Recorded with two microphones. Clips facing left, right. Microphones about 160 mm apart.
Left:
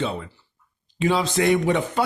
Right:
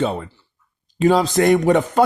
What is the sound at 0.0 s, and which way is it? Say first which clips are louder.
Speech: right 5 dB; 45° right (ahead or behind).